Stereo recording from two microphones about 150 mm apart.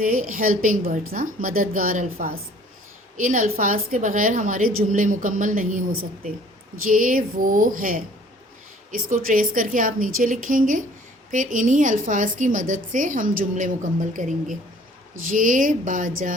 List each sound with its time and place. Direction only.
0.0 s a woman's voice: 65° right (ahead or behind)
6.9 s a woman's voice: 65° right (ahead or behind)